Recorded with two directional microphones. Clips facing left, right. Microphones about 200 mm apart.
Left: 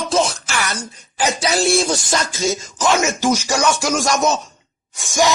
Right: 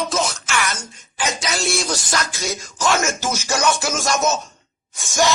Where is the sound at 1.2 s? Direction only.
35° left (ahead or behind).